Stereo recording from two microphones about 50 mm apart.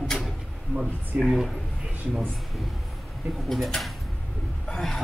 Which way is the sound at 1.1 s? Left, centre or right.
Right.